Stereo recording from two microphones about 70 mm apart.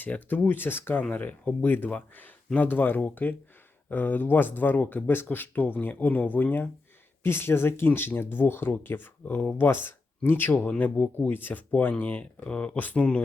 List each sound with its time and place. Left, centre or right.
0.0 s speech: left